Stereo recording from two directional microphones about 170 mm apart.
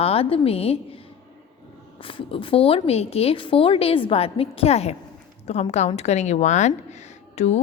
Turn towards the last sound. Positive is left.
turn(degrees=40)  # may be behind; listen again after turning